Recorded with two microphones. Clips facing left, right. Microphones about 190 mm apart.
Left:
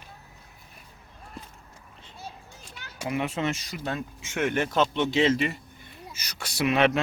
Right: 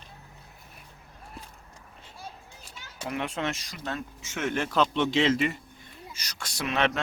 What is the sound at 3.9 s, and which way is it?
Speech, 10° left (ahead or behind).